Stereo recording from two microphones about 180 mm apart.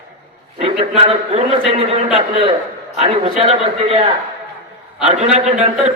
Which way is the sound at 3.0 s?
35° right (ahead or behind).